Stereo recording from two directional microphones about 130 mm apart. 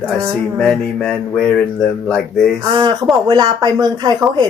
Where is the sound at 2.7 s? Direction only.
40° right (ahead or behind).